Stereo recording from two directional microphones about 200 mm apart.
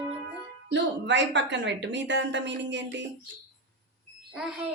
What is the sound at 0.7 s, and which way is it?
A woman's voice, 60° right (ahead or behind).